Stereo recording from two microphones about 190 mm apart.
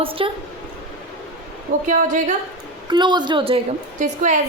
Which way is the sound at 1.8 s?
40° right (ahead or behind).